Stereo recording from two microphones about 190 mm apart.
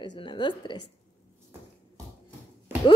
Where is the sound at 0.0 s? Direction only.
25° left (ahead or behind).